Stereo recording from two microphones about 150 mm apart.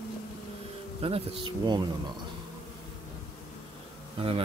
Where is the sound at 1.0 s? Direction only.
40° right (ahead or behind).